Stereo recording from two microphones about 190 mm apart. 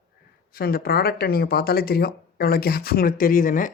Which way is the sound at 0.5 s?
55° left (ahead or behind).